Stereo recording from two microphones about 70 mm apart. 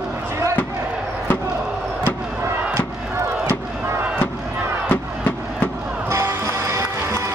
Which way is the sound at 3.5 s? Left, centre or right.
Right.